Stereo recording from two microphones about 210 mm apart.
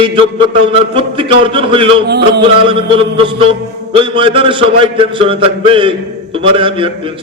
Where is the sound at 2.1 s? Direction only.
50° right (ahead or behind).